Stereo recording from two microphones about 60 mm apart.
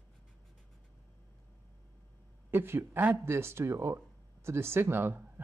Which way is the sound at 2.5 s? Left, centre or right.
Right.